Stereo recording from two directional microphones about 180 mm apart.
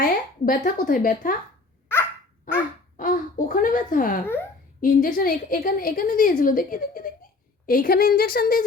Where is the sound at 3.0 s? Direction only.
50° left (ahead or behind).